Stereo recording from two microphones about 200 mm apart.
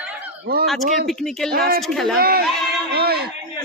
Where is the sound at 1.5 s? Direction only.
50° right (ahead or behind).